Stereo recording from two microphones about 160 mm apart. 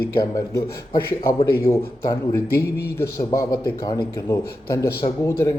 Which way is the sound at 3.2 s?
25° left (ahead or behind).